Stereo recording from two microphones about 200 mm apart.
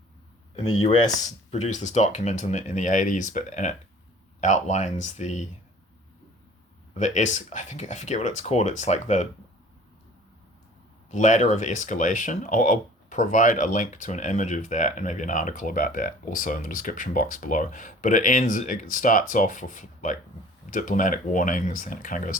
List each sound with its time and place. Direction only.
1.5 s speech: 35° left (ahead or behind)
6.9 s speech: 35° left (ahead or behind)
11.1 s speech: 35° left (ahead or behind)